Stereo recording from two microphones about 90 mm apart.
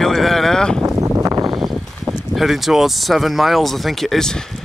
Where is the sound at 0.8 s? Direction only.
35° right (ahead or behind).